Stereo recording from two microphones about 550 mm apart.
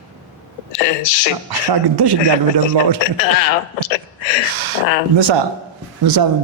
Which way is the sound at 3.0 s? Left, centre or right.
Left.